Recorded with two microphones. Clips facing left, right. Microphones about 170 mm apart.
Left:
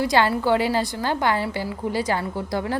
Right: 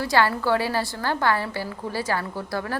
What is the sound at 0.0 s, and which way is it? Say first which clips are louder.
Speech: left 2 dB; 20° left (ahead or behind).